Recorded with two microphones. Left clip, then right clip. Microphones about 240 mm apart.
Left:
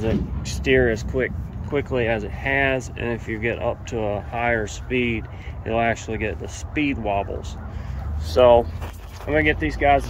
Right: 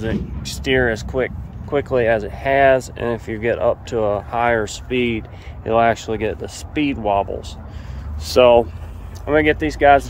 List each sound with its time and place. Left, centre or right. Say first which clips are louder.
0.0 s speech: even; centre
8.3 s speech: right 3 dB; right
9.3 s speech: right 4 dB; right